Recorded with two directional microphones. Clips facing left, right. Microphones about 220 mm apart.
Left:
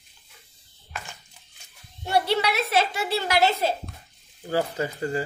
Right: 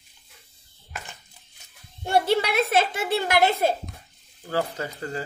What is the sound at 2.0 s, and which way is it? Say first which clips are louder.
A woman's voice: right 2 dB; 50° right (ahead or behind).